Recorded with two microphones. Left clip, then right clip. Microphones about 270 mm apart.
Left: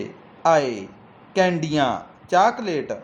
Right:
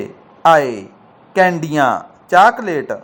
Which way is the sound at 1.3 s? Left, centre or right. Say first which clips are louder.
Right 6 dB; centre.